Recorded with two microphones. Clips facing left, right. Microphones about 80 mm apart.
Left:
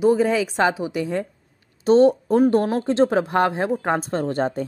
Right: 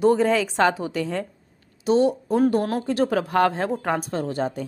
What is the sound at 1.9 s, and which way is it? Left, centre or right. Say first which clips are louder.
Speech: left 5 dB; left.